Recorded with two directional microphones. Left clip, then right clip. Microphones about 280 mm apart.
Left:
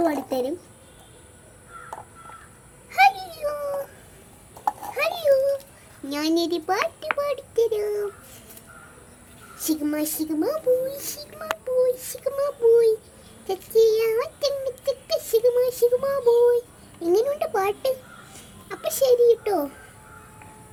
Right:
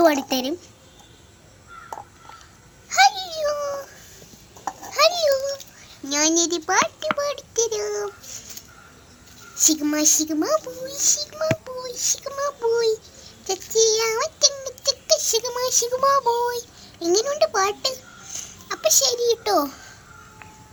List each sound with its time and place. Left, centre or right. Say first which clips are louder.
0.0 s speech: right 5 dB; right
2.9 s babbling: right 1 dB; centre
6.1 s a child's voice: right 3 dB; centre
9.6 s speech: right 5 dB; right
10.8 s child singing: right 8 dB; centre
13.5 s synthetic singing: left 1 dB; centre
19.5 s speech: right 4 dB; right